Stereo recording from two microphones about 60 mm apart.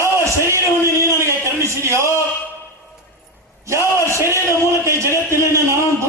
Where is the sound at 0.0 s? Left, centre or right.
Right.